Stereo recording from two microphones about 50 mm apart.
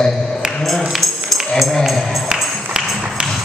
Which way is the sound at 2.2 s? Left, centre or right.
Centre.